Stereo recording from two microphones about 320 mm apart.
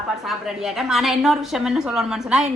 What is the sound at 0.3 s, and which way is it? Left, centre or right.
A woman's voice, centre.